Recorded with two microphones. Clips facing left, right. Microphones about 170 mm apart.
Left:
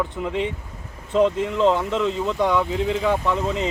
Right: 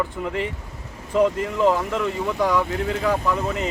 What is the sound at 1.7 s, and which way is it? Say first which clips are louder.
Speech: left 1 dB; 20° left (ahead or behind).